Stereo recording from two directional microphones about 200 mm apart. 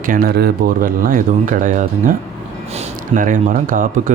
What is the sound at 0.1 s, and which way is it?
Speech, 50° right (ahead or behind).